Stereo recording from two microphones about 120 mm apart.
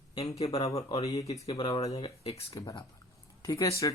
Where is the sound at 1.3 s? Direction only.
65° left (ahead or behind).